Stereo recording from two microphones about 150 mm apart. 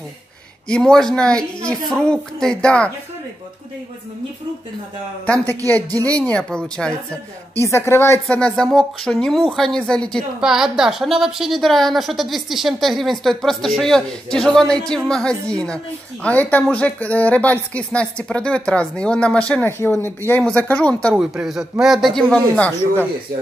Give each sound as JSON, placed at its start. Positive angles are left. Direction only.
{"t": 0.7, "sound": "a woman's voice", "side_deg": 5}
{"t": 5.2, "sound": "speech", "side_deg": 10}
{"t": 7.6, "sound": "speech", "side_deg": 20}
{"t": 8.4, "sound": "a woman's voice", "side_deg": 5}
{"t": 21.2, "sound": "a woman's voice", "side_deg": -5}